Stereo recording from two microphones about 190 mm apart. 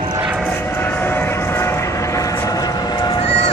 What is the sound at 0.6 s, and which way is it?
Vehicle, 10° left (ahead or behind).